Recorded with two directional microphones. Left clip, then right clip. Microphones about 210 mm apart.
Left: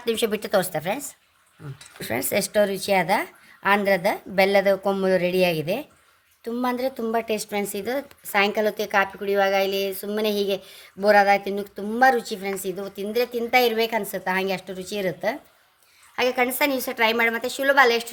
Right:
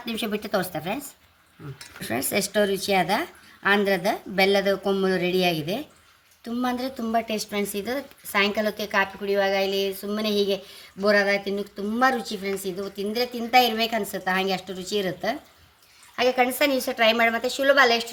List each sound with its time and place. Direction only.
0.0 s a woman's voice: 45° left (ahead or behind)